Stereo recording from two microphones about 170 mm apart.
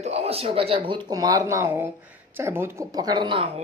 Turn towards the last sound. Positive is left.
turn(degrees=-30)  # may be behind; listen again after turning